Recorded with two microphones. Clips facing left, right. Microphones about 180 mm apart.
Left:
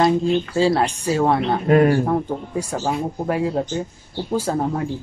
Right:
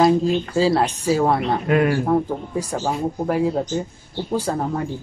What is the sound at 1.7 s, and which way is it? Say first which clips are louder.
Speech: left 4 dB; 35° left (ahead or behind).